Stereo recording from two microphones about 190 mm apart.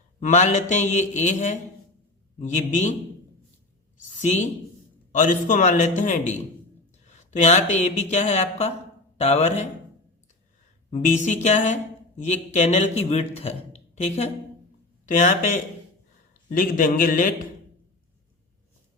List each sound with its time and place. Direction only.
0.2 s speech: 40° left (ahead or behind)
5.1 s speech: 40° left (ahead or behind)
10.9 s a man's voice: 40° left (ahead or behind)